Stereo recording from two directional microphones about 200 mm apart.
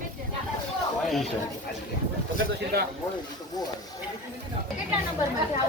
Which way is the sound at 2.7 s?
50° right (ahead or behind).